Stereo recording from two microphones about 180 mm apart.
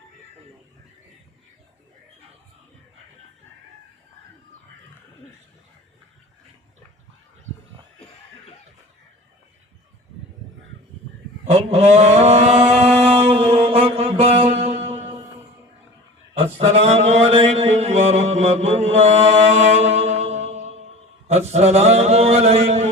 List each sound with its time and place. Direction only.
11.4 s mantra: 35° right (ahead or behind)
16.4 s mantra: 35° right (ahead or behind)